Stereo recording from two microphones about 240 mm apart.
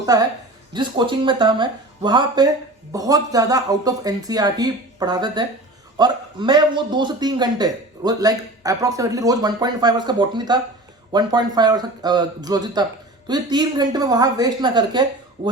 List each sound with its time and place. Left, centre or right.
0.0 s a woman's voice: centre